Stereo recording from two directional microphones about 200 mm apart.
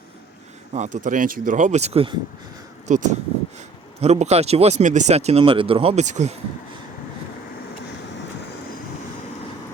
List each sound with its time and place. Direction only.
0.7 s speech: 35° right (ahead or behind)